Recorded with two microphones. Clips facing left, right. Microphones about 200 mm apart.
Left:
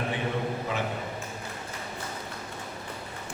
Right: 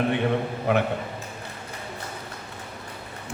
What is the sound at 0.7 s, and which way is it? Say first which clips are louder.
Speech: right 13 dB; 65° right (ahead or behind).